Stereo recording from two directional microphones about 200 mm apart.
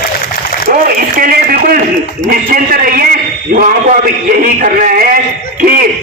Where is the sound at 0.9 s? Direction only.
45° right (ahead or behind).